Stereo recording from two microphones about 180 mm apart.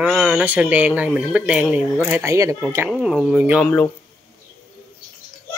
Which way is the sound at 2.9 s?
5° right (ahead or behind).